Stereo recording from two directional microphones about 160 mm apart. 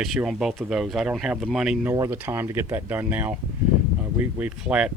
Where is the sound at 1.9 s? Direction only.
15° right (ahead or behind).